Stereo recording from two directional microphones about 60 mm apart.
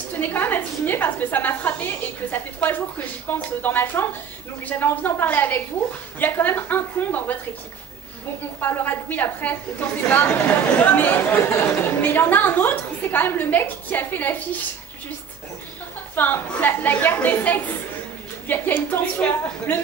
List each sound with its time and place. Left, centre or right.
0.2 s a woman's voice: left
8.5 s a woman's voice: left
16.2 s a woman's voice: left